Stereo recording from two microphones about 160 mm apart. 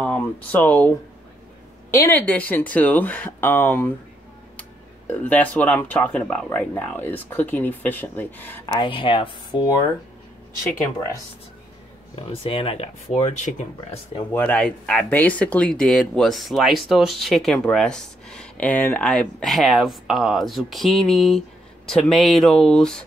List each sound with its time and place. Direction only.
0.0 s speech: 10° left (ahead or behind)
1.9 s speech: 15° left (ahead or behind)
8.7 s speech: 30° left (ahead or behind)
12.2 s speech: 35° left (ahead or behind)
14.3 s speech: 10° left (ahead or behind)